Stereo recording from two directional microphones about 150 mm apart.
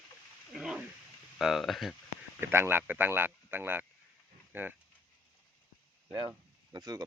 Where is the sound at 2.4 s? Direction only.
15° right (ahead or behind).